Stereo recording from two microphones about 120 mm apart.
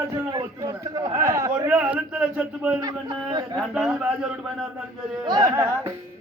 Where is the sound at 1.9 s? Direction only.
10° right (ahead or behind).